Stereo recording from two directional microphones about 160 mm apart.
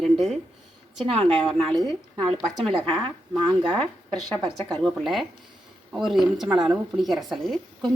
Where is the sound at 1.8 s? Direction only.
30° right (ahead or behind).